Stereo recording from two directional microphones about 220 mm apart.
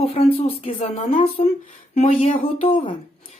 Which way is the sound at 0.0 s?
30° left (ahead or behind).